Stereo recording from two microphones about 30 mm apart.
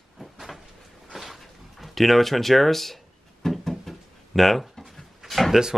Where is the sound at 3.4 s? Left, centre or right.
Centre.